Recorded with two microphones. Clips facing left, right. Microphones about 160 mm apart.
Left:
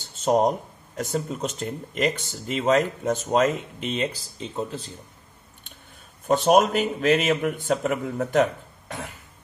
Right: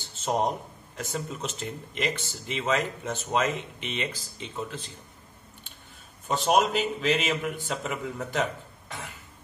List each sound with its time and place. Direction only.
0.2 s speech: 45° left (ahead or behind)
6.2 s a man's voice: 50° left (ahead or behind)